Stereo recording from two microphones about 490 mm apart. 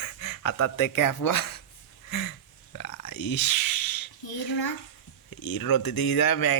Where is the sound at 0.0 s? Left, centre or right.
Left.